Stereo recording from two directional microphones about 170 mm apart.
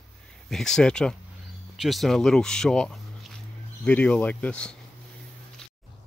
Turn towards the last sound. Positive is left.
turn(degrees=5)  # may be behind; listen again after turning